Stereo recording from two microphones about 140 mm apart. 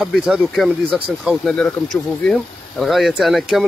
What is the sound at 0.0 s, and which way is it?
Speech, 5° right (ahead or behind).